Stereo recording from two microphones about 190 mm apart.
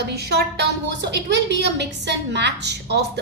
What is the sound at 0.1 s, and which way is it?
A woman's voice, 55° right (ahead or behind).